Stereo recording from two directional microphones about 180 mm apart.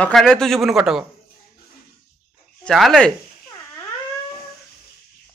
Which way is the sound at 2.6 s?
Centre (ahead or behind).